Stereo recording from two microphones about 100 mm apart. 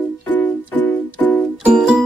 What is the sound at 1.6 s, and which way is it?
Music, 10° right (ahead or behind).